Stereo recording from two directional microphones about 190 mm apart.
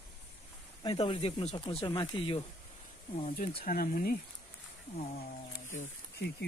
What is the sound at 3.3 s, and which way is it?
Speech, 50° left (ahead or behind).